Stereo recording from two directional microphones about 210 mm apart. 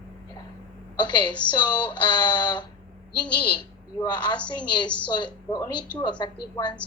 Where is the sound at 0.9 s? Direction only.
20° left (ahead or behind).